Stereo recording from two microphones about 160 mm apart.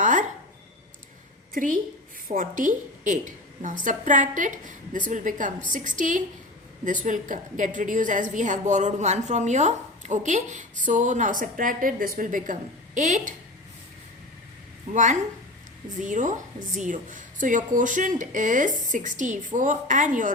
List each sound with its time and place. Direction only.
0.0 s a sound: 50° right (ahead or behind)
1.5 s a woman's voice: 55° right (ahead or behind)
16.0 s a woman's voice: 50° right (ahead or behind)